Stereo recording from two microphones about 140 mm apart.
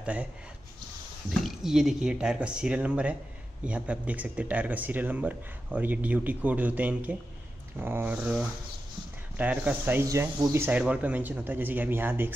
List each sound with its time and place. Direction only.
0.0 s speech: 10° right (ahead or behind)
1.4 s speech: 5° right (ahead or behind)